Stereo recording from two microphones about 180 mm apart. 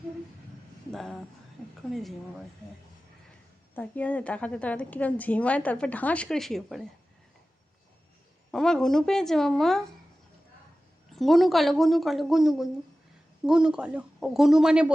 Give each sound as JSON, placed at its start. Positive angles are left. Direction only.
{"t": 0.9, "sound": "a sound", "side_deg": 5}
{"t": 1.9, "sound": "speech", "side_deg": 0}
{"t": 3.8, "sound": "a woman's voice", "side_deg": 10}
{"t": 8.5, "sound": "speech", "side_deg": 5}
{"t": 11.1, "sound": "speech", "side_deg": 0}